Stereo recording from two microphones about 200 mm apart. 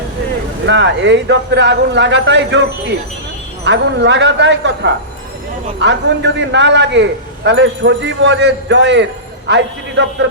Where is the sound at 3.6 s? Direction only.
60° right (ahead or behind).